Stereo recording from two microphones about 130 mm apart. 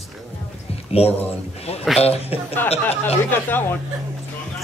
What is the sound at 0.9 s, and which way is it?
A man's voice, 50° left (ahead or behind).